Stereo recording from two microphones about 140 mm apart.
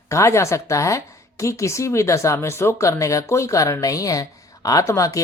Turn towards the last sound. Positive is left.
turn(degrees=20)  # may be behind; listen again after turning